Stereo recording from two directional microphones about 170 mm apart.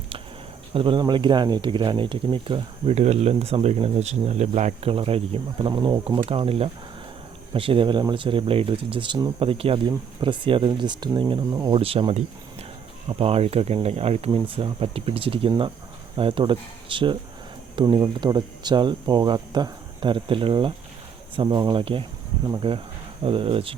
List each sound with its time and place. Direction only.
0.7 s speech: 30° right (ahead or behind)